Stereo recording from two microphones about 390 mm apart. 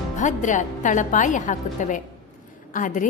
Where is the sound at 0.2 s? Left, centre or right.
Centre.